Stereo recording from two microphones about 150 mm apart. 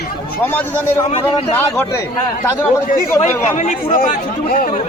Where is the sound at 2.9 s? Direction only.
55° left (ahead or behind).